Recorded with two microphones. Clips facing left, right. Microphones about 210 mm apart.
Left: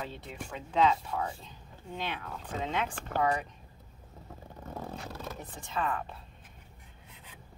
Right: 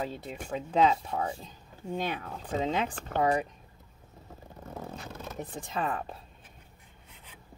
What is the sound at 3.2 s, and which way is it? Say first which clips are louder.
Speech: right 3 dB; 30° right (ahead or behind).